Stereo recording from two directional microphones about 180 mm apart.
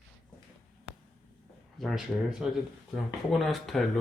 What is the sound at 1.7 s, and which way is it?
Speech, centre (ahead or behind).